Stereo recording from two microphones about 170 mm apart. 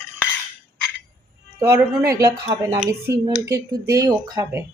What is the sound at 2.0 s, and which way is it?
Speech, 20° right (ahead or behind).